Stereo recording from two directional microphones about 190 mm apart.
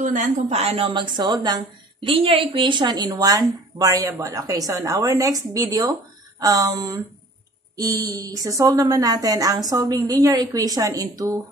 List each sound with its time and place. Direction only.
0.0 s a woman's voice: 40° right (ahead or behind); by 11.3 s 15° right (ahead or behind)